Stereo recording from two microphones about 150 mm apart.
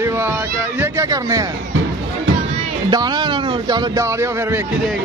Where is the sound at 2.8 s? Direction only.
30° right (ahead or behind).